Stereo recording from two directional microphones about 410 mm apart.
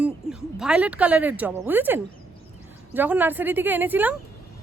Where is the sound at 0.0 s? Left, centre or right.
Centre.